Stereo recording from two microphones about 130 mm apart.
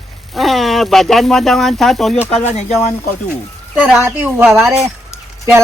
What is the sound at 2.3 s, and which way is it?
Speech, 55° left (ahead or behind).